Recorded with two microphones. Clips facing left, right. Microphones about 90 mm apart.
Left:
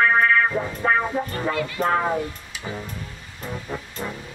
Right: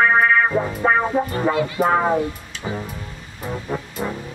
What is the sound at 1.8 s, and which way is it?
Speech, 15° right (ahead or behind).